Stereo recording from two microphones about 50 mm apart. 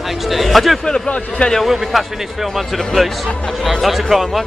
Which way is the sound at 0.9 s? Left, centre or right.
Centre.